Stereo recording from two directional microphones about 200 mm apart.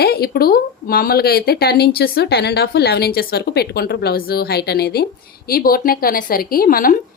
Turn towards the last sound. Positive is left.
turn(degrees=45)  # may be behind; listen again after turning